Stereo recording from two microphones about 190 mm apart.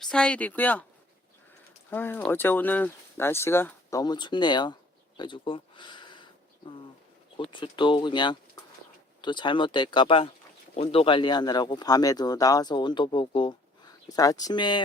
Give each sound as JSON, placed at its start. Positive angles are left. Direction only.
{"t": 0.0, "sound": "speech", "side_deg": 5}
{"t": 1.9, "sound": "speech", "side_deg": 10}
{"t": 7.3, "sound": "speech", "side_deg": 25}